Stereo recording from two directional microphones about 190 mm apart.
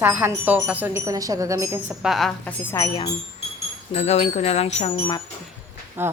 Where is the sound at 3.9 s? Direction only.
35° left (ahead or behind).